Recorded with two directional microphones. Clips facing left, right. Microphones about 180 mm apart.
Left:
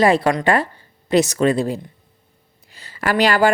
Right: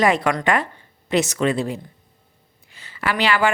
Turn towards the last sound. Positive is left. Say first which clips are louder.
# left 4 dB
turn(degrees=40)  # may be behind; listen again after turning